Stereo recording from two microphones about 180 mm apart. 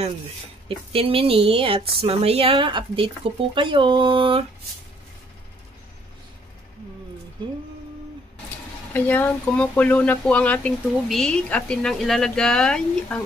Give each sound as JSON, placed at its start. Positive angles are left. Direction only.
{"t": 0.7, "sound": "speech", "side_deg": -30}
{"t": 7.4, "sound": "speech", "side_deg": -25}
{"t": 8.9, "sound": "speech", "side_deg": 10}